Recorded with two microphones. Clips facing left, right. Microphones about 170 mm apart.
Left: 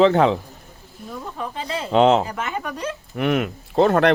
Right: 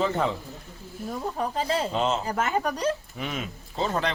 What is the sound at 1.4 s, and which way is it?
Speech, 40° right (ahead or behind).